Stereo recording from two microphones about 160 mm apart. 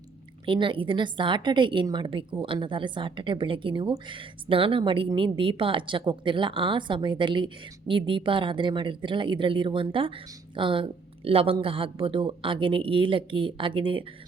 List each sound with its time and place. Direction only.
0.4 s a woman's voice: 30° right (ahead or behind)